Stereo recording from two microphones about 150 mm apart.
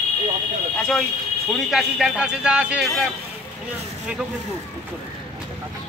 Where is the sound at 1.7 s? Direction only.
5° right (ahead or behind).